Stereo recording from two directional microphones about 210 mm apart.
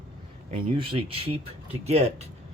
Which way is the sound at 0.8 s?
25° right (ahead or behind).